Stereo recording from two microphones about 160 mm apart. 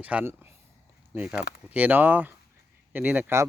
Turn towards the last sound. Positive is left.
turn(degrees=-10)  # may be behind; listen again after turning